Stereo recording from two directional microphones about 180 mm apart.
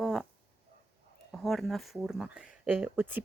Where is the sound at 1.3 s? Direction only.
Centre (ahead or behind).